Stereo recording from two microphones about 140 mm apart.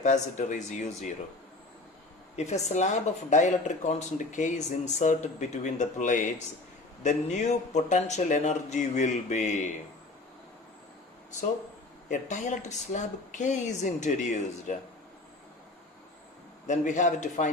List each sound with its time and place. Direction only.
0.0 s speech: 60° left (ahead or behind)
2.3 s speech: 55° left (ahead or behind)
12.0 s speech: 60° left (ahead or behind)
16.6 s speech: 60° left (ahead or behind)